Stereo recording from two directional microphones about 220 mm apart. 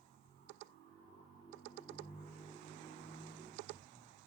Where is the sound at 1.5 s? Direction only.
35° right (ahead or behind).